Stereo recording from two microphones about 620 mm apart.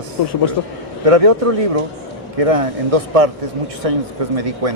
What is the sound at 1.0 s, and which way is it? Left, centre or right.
A man's voice, right.